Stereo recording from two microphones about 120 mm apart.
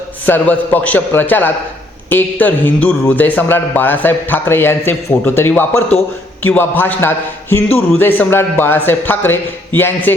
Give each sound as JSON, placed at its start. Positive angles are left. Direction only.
{"t": 0.3, "sound": "speech", "side_deg": 15}